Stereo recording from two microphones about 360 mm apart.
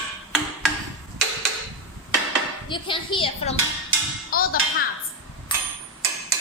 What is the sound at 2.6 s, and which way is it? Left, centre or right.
Speech, centre.